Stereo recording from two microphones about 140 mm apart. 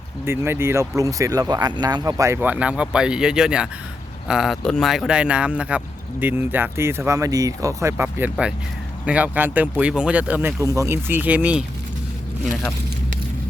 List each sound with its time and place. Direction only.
0.3 s speech: 15° right (ahead or behind)
10.6 s speech: 20° right (ahead or behind)